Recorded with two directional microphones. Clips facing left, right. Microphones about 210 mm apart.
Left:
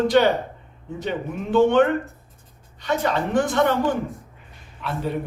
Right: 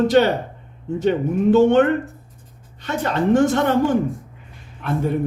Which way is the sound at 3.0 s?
45° right (ahead or behind).